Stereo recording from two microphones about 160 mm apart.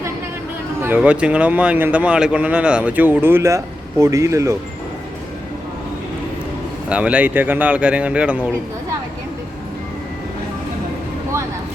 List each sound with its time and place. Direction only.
0.8 s speech: 10° right (ahead or behind)
6.8 s speech: 10° right (ahead or behind)